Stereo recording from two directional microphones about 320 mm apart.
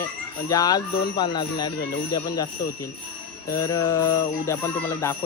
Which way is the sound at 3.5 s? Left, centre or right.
Centre.